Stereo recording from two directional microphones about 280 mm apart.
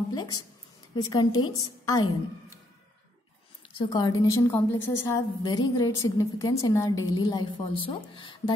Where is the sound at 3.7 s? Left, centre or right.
Centre.